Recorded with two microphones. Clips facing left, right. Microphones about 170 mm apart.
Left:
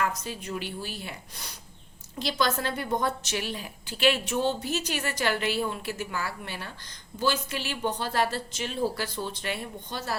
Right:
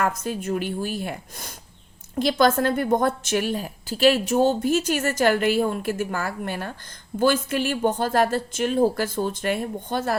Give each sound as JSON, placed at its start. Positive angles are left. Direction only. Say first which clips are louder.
{"t": 0.0, "sound": "a woman's voice", "louder": "right 6 dB", "side_deg": -50}